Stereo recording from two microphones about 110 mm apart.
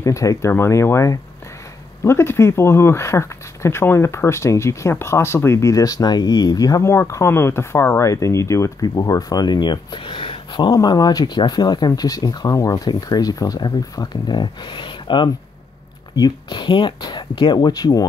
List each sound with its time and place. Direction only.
0.0 s speech: 30° left (ahead or behind)